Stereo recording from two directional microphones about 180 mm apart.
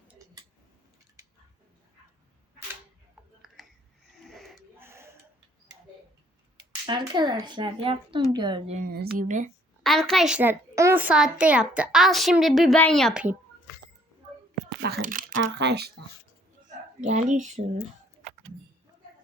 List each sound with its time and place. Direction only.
3.6 s a sound: centre (ahead or behind)
4.8 s a sound: 15° right (ahead or behind)
6.8 s speech: 25° right (ahead or behind)
8.9 s speech: 60° right (ahead or behind)
9.2 s speech: 45° right (ahead or behind)
9.8 s a child's voice: centre (ahead or behind)
14.8 s a sound: 60° right (ahead or behind)
15.4 s speech: 70° right (ahead or behind)
17.0 s speech: 45° right (ahead or behind)